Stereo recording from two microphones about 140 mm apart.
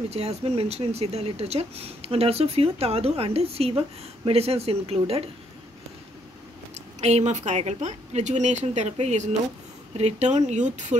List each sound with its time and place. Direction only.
0.1 s speech: 50° right (ahead or behind)
7.0 s speech: 50° right (ahead or behind)